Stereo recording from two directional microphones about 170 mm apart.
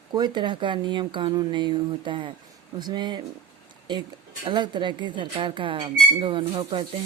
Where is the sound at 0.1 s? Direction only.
25° right (ahead or behind).